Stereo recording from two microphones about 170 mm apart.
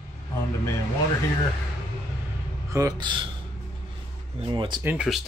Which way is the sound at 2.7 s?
20° right (ahead or behind).